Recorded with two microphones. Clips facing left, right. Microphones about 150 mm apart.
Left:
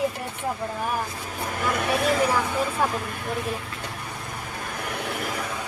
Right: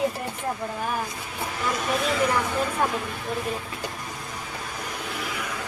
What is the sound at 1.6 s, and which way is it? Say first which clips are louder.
Speech: left 2 dB; 55° left (ahead or behind).